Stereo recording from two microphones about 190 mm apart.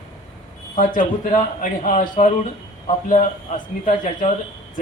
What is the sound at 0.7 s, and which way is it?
A man's voice, 45° left (ahead or behind).